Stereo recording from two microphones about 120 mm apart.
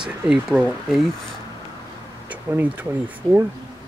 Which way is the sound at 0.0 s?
5° right (ahead or behind).